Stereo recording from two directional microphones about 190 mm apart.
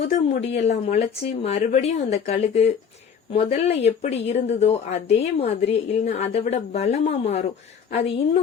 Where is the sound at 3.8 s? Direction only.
35° left (ahead or behind).